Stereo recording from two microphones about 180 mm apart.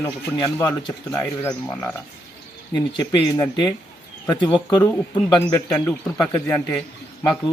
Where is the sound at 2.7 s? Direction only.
20° left (ahead or behind).